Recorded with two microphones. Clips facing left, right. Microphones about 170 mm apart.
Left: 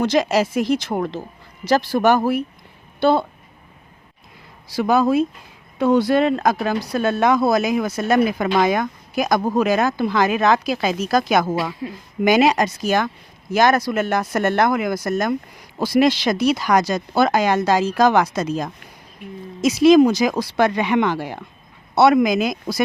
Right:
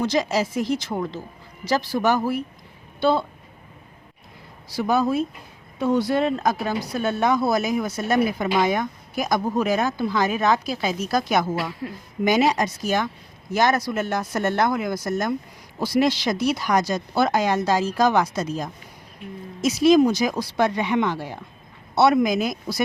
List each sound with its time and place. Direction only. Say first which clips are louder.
0.0 s a woman's voice: left 4 dB; 80° left; by 3.2 s 65° left (ahead or behind)
4.7 s speech: left 4 dB; 90° left